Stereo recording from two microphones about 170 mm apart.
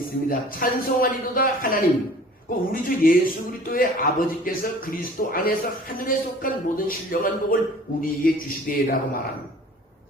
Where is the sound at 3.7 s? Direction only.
55° left (ahead or behind).